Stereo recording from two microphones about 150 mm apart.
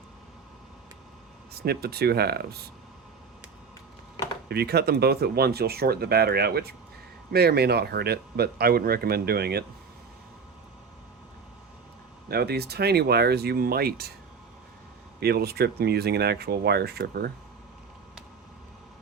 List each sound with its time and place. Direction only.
1.6 s speech: 90° right
4.4 s speech: 90° right
12.3 s speech: 90° right
15.2 s speech: 90° right